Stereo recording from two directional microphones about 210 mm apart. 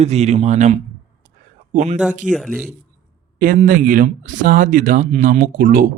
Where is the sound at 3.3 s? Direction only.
40° right (ahead or behind).